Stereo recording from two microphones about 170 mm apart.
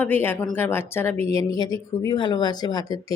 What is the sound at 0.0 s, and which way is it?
Speech, 10° left (ahead or behind).